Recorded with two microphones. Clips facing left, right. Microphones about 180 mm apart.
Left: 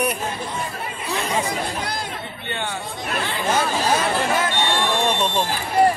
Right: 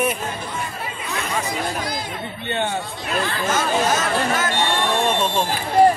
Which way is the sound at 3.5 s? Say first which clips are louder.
Even; 30° left (ahead or behind).